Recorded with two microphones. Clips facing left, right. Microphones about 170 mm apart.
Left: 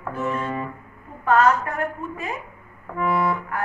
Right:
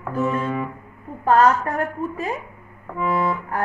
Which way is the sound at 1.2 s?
35° right (ahead or behind).